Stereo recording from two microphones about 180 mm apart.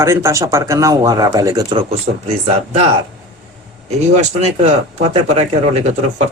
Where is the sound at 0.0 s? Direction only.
15° right (ahead or behind).